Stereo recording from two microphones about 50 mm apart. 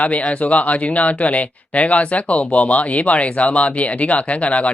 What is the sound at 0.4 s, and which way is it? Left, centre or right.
Speech, left.